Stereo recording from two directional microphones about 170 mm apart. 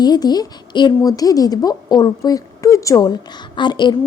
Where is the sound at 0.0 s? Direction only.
25° left (ahead or behind).